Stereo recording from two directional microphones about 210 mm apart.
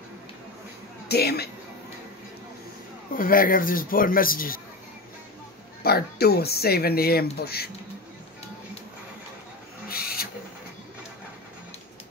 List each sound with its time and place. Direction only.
1.0 s speech: 50° left (ahead or behind)
3.2 s speech: 40° left (ahead or behind)
5.8 s speech: 50° left (ahead or behind)
9.8 s owl: 45° left (ahead or behind)